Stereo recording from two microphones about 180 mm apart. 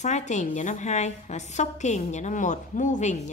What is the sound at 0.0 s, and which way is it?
A woman's voice, 40° left (ahead or behind).